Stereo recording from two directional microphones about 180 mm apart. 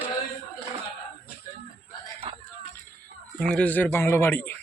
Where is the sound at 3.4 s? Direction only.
5° left (ahead or behind).